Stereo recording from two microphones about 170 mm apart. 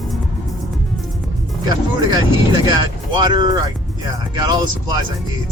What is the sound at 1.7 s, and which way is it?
Speech, 25° right (ahead or behind).